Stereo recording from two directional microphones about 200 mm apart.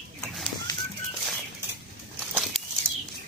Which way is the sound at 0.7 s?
20° left (ahead or behind).